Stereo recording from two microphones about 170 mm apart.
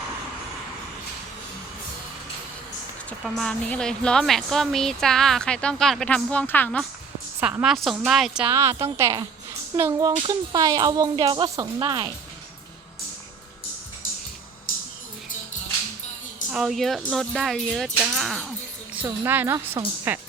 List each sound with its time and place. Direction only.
3.1 s a woman's voice: 5° left (ahead or behind)
7.3 s a woman's voice: 10° right (ahead or behind)
8.4 s a woman's voice: 15° right (ahead or behind)
16.5 s a woman's voice: 5° right (ahead or behind)
18.9 s a woman's voice: 15° right (ahead or behind)